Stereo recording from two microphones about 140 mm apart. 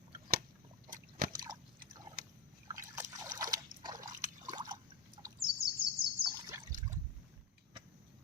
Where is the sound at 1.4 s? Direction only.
30° right (ahead or behind).